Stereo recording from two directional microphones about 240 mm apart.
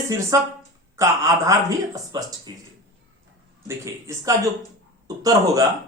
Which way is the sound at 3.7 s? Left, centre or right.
Centre.